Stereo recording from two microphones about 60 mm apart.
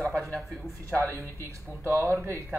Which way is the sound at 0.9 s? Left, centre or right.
Right.